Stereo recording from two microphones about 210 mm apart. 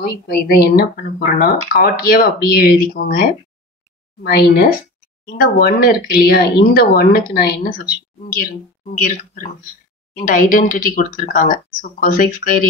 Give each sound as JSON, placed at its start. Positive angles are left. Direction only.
{"t": 0.3, "sound": "speech", "side_deg": 50}